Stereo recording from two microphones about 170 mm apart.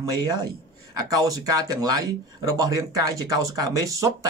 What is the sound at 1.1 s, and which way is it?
Speech, 20° right (ahead or behind).